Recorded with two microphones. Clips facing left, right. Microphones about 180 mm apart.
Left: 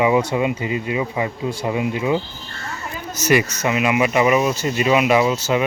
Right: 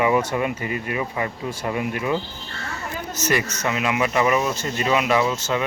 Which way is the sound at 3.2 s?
10° left (ahead or behind).